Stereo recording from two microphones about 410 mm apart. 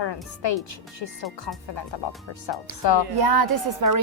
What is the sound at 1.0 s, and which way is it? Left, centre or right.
Speech, left.